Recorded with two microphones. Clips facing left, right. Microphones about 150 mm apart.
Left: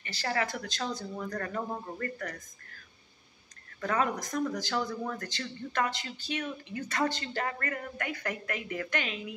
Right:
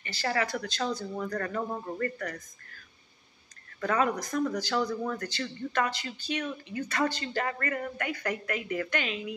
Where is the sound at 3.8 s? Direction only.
25° left (ahead or behind).